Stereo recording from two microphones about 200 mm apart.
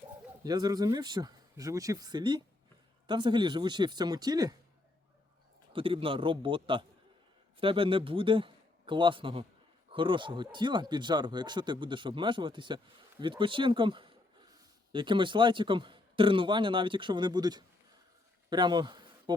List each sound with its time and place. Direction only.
0.4 s speech: 20° right (ahead or behind)
5.7 s a man's voice: 25° right (ahead or behind)